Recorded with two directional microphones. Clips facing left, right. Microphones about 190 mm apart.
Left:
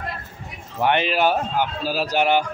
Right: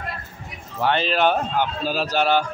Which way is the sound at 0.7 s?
15° left (ahead or behind).